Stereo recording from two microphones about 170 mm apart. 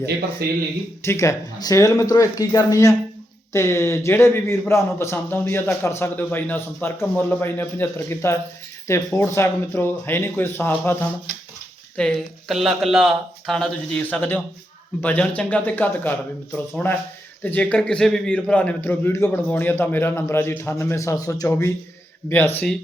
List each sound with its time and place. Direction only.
0.4 s speech: 65° right (ahead or behind)
1.0 s a man's voice: 15° left (ahead or behind)